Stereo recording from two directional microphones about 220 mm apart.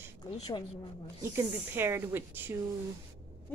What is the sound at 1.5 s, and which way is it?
A woman's voice, 10° right (ahead or behind).